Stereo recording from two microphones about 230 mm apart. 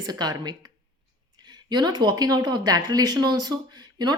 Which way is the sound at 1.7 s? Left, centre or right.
Centre.